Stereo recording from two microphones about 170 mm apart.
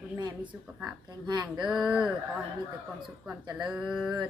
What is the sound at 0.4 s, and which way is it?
Speech, 10° right (ahead or behind).